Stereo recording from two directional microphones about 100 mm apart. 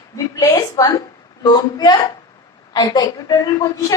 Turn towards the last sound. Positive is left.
turn(degrees=35)  # may be behind; listen again after turning